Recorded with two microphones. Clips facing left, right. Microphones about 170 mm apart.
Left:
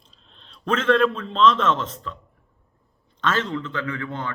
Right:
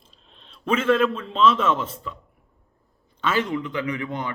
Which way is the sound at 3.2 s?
10° right (ahead or behind).